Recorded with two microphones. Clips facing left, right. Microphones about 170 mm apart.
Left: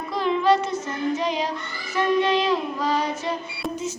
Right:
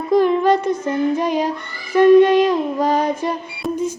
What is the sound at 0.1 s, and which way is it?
Child singing, 50° right (ahead or behind).